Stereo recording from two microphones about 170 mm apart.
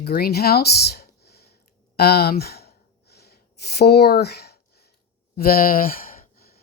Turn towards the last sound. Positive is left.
turn(degrees=55)  # may be behind; listen again after turning